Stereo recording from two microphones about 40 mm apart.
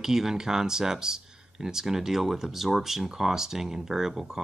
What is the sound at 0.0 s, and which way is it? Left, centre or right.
Speech, centre.